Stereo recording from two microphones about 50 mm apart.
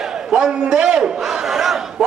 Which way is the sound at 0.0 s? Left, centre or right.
Centre.